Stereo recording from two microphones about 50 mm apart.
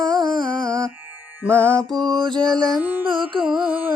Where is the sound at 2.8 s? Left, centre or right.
Right.